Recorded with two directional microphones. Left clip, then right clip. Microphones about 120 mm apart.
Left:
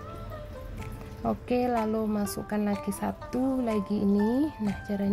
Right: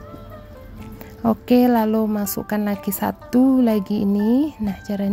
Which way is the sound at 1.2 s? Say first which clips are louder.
Right 10 dB; 40° right (ahead or behind).